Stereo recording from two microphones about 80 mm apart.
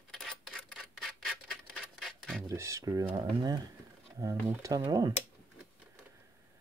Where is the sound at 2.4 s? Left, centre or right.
Right.